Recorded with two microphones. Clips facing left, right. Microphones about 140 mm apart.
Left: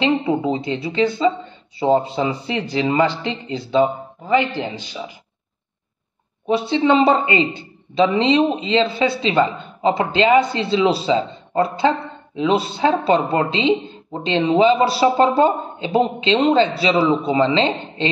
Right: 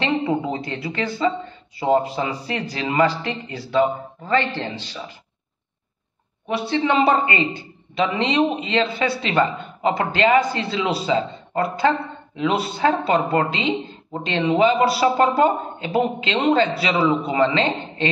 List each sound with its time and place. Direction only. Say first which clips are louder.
0.0 s speech: left 3 dB; 20° left (ahead or behind)
6.4 s speech: left 4 dB; 25° left (ahead or behind)